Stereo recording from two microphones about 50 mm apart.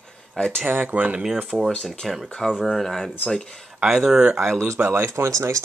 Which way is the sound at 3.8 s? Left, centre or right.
Centre.